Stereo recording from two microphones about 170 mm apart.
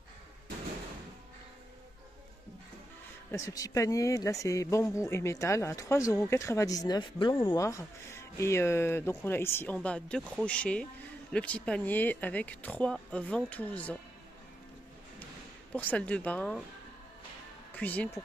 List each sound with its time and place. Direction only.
3.3 s speech: 20° left (ahead or behind)
7.6 s speech: 15° left (ahead or behind)
15.7 s speech: 10° left (ahead or behind)
17.7 s speech: 10° left (ahead or behind)